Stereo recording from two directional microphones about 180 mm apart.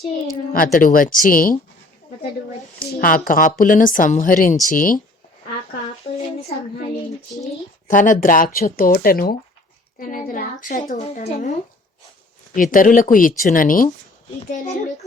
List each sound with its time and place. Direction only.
0.5 s a woman's voice: 50° left (ahead or behind)
2.7 s a woman's voice: 50° left (ahead or behind)
7.9 s a woman's voice: 45° left (ahead or behind)
12.5 s a woman's voice: 50° left (ahead or behind)